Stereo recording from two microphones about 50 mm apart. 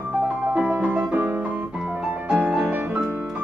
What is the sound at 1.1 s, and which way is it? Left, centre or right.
Piano, right.